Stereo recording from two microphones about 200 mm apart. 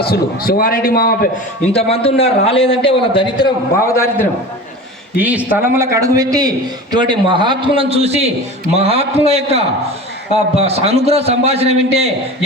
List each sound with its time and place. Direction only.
0.0 s a man's voice: 50° left (ahead or behind)
1.7 s a man's voice: 30° left (ahead or behind)
3.9 s a man's voice: 15° left (ahead or behind)
5.2 s a man's voice: 10° right (ahead or behind); by 12.1 s 30° right (ahead or behind)